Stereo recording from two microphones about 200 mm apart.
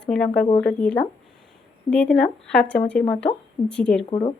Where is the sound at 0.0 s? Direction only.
5° left (ahead or behind).